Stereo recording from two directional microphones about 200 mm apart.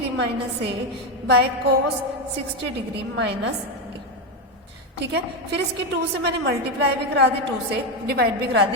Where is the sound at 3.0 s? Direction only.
60° right (ahead or behind).